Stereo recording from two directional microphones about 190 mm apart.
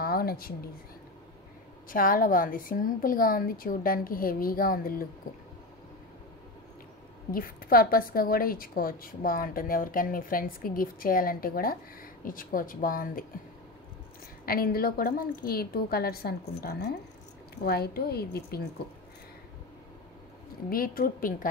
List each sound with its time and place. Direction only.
0.0 s a sound: 50° left (ahead or behind)
1.9 s a woman's voice: 45° left (ahead or behind)
7.2 s a woman's voice: 50° left (ahead or behind)
14.4 s a woman's voice: 50° left (ahead or behind)
20.7 s a woman's voice: 50° left (ahead or behind)